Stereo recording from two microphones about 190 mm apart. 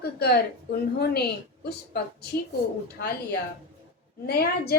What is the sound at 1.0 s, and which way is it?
A woman's voice, 55° left (ahead or behind).